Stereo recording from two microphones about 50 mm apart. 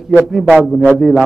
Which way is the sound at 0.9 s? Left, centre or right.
Centre.